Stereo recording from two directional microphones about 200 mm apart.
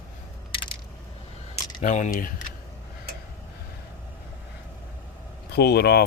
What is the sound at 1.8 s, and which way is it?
Speech, 40° left (ahead or behind).